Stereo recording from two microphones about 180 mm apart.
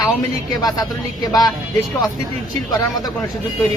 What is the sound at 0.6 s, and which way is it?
Speech, 20° left (ahead or behind).